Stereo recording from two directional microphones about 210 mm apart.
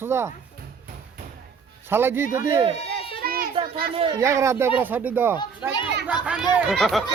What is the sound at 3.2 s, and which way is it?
Children playing, 45° right (ahead or behind).